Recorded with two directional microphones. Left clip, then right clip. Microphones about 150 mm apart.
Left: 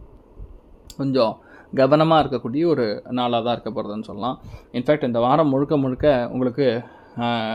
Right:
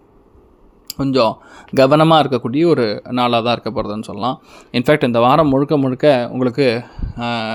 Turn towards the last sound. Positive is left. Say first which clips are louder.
# right 2 dB
turn(degrees=-5)  # may be behind; listen again after turning